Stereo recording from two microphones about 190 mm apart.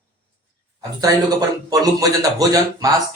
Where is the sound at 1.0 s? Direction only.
20° right (ahead or behind).